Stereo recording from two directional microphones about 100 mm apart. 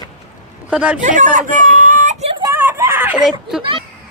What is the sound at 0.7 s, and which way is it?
Speech, 10° right (ahead or behind).